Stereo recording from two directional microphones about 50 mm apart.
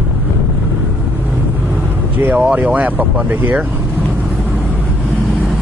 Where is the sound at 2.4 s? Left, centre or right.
Right.